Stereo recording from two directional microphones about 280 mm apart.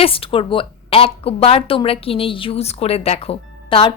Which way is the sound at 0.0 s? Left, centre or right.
Centre.